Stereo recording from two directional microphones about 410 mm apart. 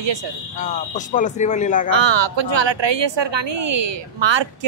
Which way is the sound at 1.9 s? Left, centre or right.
Right.